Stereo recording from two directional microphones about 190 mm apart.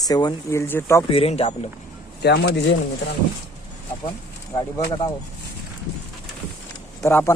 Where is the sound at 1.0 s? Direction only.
30° left (ahead or behind).